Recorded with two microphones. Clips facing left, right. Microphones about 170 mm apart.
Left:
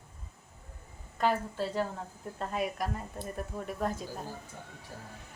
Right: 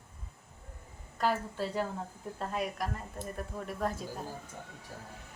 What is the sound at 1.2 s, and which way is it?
A woman's voice, 5° right (ahead or behind).